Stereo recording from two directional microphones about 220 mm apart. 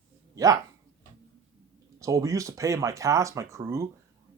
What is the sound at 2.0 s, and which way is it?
A man's voice, 15° right (ahead or behind).